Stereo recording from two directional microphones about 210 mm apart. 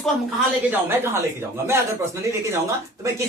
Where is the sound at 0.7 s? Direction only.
10° right (ahead or behind).